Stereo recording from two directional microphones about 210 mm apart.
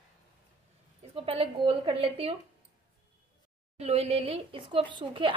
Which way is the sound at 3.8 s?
30° right (ahead or behind).